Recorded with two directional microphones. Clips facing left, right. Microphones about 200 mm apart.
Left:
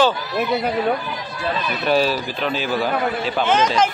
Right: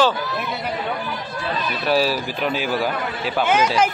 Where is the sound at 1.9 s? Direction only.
5° right (ahead or behind).